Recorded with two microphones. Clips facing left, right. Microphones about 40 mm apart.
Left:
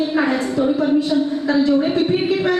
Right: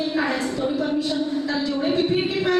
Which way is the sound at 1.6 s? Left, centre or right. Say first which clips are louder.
Left 11 dB; centre.